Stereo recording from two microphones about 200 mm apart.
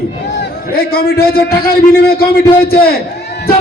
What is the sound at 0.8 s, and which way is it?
A man's voice, 50° left (ahead or behind).